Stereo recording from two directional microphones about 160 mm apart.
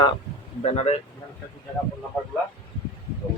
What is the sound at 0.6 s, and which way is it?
Speech, 45° left (ahead or behind).